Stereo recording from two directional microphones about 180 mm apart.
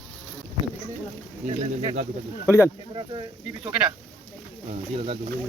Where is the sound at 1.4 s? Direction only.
35° right (ahead or behind).